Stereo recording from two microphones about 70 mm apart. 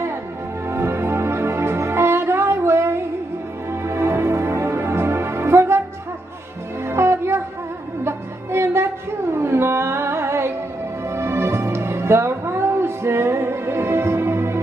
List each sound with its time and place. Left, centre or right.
0.7 s music: right
6.9 s music: right